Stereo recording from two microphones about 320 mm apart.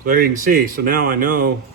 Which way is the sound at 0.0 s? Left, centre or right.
Right.